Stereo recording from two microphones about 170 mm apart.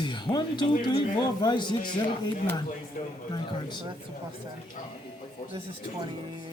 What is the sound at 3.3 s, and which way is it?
Speech, 25° left (ahead or behind).